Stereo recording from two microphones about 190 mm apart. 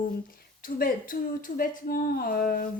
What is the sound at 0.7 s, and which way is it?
Speech, 50° left (ahead or behind).